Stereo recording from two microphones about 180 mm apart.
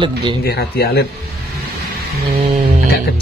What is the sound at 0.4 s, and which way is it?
Speech, 60° left (ahead or behind).